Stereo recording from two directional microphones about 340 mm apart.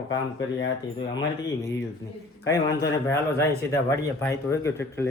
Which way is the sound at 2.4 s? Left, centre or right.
Centre.